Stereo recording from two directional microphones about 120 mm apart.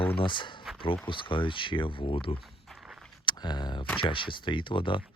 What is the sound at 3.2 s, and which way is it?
Speech, 40° left (ahead or behind).